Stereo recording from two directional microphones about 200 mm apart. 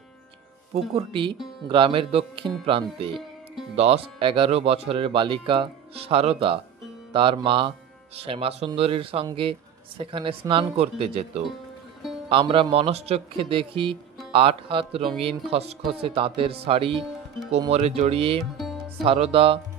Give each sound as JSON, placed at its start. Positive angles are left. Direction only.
{"t": 0.9, "sound": "a man's voice", "side_deg": -25}